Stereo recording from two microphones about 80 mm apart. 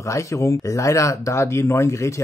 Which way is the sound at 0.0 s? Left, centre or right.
Left.